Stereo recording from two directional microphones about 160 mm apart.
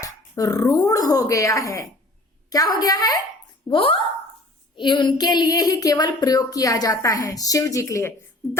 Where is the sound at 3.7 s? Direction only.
35° left (ahead or behind).